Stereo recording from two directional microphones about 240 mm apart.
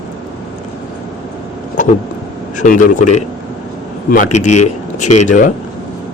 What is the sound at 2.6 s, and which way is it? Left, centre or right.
Speech, left.